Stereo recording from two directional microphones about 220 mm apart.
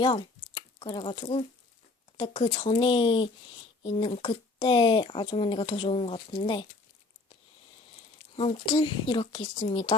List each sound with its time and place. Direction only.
0.0 s speech: 20° left (ahead or behind)
8.4 s speech: 25° left (ahead or behind)